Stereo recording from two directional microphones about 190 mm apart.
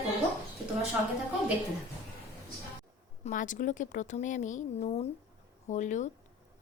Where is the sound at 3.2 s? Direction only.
40° left (ahead or behind).